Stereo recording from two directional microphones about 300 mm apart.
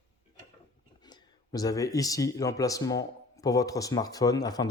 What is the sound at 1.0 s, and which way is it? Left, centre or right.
A man's voice, centre.